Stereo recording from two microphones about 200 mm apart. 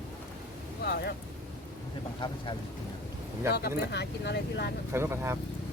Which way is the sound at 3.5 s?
55° left (ahead or behind).